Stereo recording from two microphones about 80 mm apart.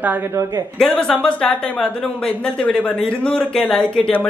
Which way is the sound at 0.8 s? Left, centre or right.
Centre.